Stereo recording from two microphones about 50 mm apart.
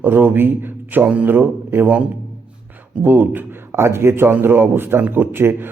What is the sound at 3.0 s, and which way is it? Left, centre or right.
A man's voice, right.